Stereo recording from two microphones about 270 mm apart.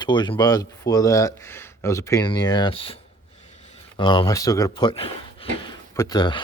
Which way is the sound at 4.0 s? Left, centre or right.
Centre.